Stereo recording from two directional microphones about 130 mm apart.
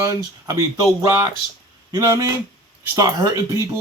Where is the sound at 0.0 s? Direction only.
25° right (ahead or behind).